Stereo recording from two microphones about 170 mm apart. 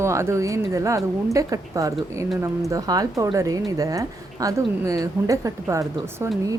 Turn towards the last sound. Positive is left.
turn(degrees=-15)  # may be behind; listen again after turning